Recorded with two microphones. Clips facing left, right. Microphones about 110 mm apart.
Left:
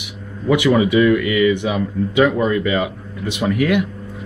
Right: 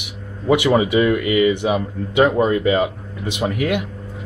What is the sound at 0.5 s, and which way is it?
A man's voice, 30° right (ahead or behind).